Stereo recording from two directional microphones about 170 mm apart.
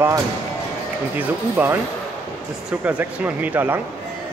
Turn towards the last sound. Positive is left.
turn(degrees=-10)  # may be behind; listen again after turning